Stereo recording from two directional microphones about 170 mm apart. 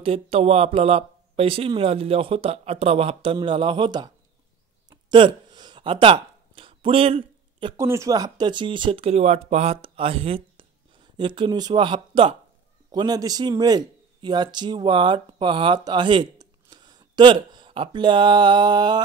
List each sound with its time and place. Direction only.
0.0 s speech: 35° right (ahead or behind)
4.8 s a sound: 25° right (ahead or behind)
7.7 s a man's voice: 15° right (ahead or behind)